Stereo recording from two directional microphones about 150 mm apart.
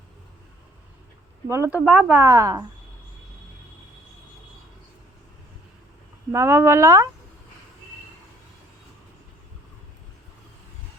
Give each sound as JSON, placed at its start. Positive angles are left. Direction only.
{"t": 1.5, "sound": "speech", "side_deg": -15}
{"t": 1.8, "sound": "speech", "side_deg": 5}
{"t": 2.0, "sound": "a woman's voice", "side_deg": -20}
{"t": 6.3, "sound": "speech", "side_deg": -15}